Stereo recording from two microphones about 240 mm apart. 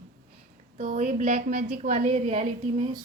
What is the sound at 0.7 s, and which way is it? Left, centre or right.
A woman's voice, right.